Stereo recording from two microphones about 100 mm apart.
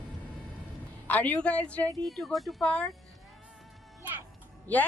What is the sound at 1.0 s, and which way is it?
Speech, 15° left (ahead or behind).